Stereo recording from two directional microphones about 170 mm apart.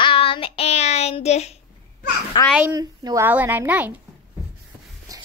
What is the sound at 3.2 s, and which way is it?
Speech, 10° right (ahead or behind).